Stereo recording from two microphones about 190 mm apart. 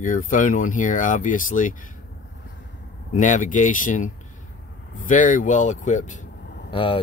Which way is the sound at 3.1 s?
40° left (ahead or behind).